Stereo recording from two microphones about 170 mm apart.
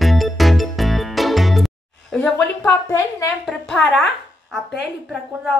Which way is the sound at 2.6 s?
15° left (ahead or behind).